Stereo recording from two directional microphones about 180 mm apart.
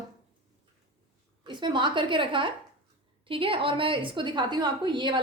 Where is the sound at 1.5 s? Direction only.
25° right (ahead or behind).